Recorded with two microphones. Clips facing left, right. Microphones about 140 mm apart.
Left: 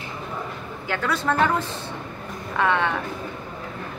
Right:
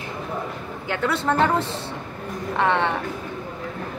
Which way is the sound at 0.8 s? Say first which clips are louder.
Right 1 dB; 25° right (ahead or behind).